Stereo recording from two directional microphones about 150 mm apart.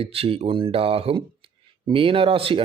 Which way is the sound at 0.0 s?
40° right (ahead or behind).